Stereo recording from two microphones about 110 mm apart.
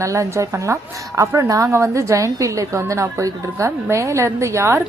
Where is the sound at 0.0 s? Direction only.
30° right (ahead or behind).